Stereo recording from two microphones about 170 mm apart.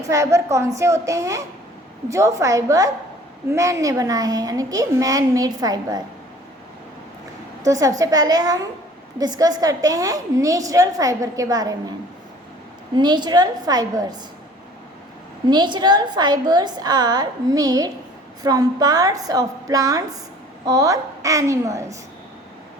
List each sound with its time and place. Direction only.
0.1 s a woman's voice: 20° right (ahead or behind)
7.6 s a woman's voice: 20° right (ahead or behind)
13.0 s a woman's voice: 25° right (ahead or behind)
15.4 s a woman's voice: 25° right (ahead or behind)